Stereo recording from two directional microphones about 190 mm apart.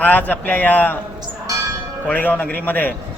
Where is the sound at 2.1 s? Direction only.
10° left (ahead or behind).